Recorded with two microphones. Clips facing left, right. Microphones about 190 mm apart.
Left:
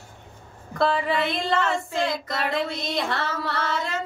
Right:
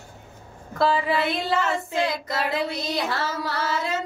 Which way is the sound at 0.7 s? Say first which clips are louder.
Right 1 dB; 5° right (ahead or behind).